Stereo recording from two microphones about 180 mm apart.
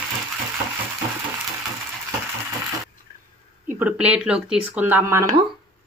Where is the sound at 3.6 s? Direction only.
10° right (ahead or behind).